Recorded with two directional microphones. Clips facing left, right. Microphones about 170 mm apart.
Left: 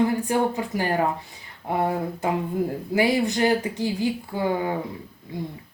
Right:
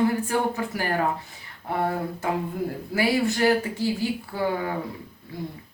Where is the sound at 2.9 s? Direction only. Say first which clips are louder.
Left 1 dB; 20° left (ahead or behind).